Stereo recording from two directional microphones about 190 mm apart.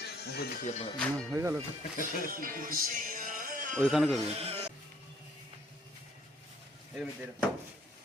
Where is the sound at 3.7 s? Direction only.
Centre (ahead or behind).